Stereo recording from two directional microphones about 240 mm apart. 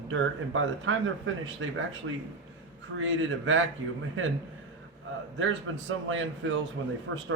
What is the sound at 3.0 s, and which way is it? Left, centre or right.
Speech, right.